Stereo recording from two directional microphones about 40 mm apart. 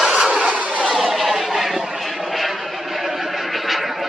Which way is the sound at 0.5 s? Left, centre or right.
Right.